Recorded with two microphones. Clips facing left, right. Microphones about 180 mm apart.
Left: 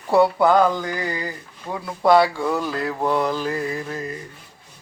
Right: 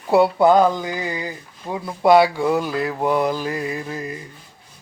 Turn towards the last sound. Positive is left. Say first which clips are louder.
# even
turn(degrees=-10)  # may be behind; listen again after turning